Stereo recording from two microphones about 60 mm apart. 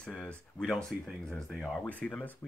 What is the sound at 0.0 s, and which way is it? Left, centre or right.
Speech, centre.